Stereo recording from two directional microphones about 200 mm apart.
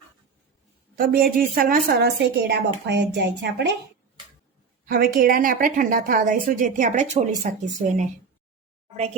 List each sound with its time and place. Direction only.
0.9 s a woman's voice: 45° right (ahead or behind)
2.5 s speech: 60° right (ahead or behind)
4.9 s a woman's voice: 45° right (ahead or behind)